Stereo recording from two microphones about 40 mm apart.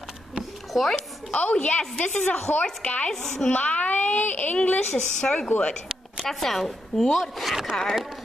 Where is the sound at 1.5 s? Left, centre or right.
Left.